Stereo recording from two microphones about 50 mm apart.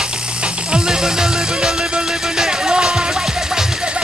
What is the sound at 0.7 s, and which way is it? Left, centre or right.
Music, centre.